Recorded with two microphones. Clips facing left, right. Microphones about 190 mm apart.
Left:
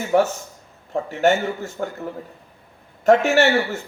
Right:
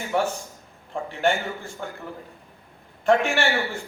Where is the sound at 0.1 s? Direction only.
45° left (ahead or behind).